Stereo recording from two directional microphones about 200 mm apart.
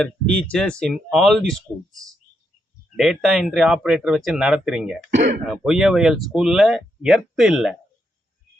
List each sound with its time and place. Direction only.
0.0 s speech: 5° left (ahead or behind)
5.1 s speech: 35° right (ahead or behind)
5.5 s speech: 5° right (ahead or behind)